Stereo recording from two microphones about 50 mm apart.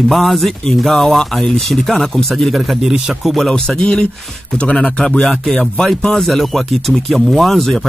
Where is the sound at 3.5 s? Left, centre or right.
Centre.